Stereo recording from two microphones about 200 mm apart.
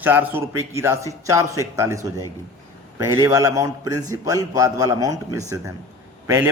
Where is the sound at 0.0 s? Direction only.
10° right (ahead or behind).